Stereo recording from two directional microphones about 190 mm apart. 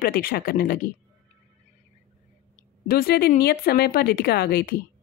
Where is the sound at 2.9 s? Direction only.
55° left (ahead or behind).